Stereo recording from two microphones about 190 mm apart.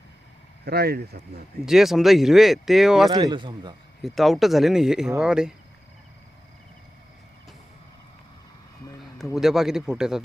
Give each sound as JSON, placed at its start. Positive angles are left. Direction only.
{"t": 0.6, "sound": "speech", "side_deg": -55}
{"t": 1.6, "sound": "speech", "side_deg": 0}
{"t": 3.1, "sound": "speech", "side_deg": -25}
{"t": 4.0, "sound": "speech", "side_deg": 0}
{"t": 9.3, "sound": "speech", "side_deg": 0}